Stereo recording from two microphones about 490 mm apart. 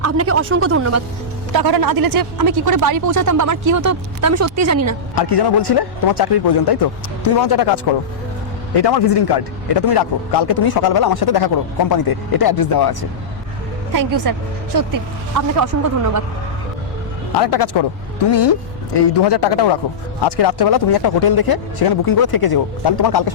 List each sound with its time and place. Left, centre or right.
0.0 s speech: right
1.5 s speech: right
5.1 s a man's voice: left
8.8 s a man's voice: left
13.9 s speech: right
17.4 s a man's voice: left